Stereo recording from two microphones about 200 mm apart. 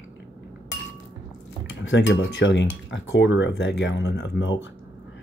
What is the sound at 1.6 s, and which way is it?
Speech, 65° left (ahead or behind).